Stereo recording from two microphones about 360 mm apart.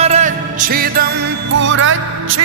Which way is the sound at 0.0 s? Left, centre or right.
Centre.